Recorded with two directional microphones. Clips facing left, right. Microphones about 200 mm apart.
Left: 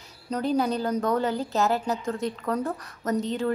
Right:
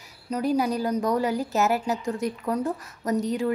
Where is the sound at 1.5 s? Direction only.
20° right (ahead or behind).